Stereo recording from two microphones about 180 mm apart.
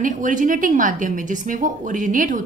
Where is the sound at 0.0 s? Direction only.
45° right (ahead or behind).